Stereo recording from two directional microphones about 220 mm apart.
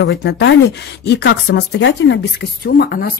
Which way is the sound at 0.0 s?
50° left (ahead or behind).